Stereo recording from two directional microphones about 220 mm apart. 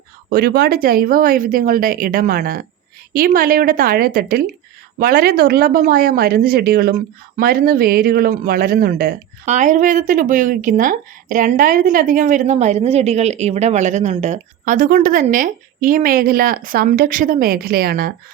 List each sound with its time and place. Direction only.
0.3 s speech: 45° right (ahead or behind)